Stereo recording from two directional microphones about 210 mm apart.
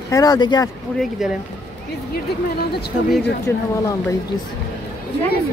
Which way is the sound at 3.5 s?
10° left (ahead or behind).